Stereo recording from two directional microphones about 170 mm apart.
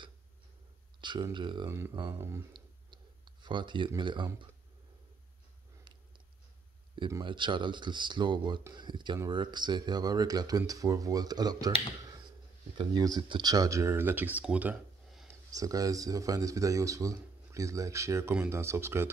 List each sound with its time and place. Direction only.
1.0 s speech: 25° right (ahead or behind)
1.7 s speech: 15° right (ahead or behind)
2.5 s clicking: 25° right (ahead or behind)
7.1 s speech: 25° right (ahead or behind)
12.7 s speech: 25° right (ahead or behind)
15.5 s speech: 20° right (ahead or behind)